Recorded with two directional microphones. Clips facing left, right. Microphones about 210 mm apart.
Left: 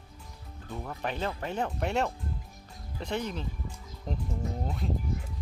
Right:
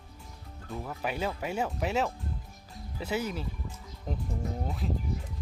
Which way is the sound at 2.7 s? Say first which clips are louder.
Right 1 dB; 5° right (ahead or behind).